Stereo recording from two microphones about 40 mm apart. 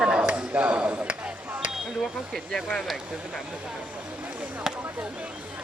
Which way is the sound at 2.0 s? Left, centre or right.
Centre.